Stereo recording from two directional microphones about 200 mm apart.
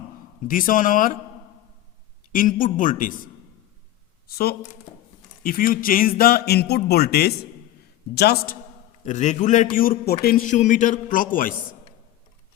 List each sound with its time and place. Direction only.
0.4 s speech: 40° left (ahead or behind)
2.3 s a man's voice: 40° left (ahead or behind)
4.3 s speech: 50° left (ahead or behind)
9.0 s a man's voice: 35° left (ahead or behind)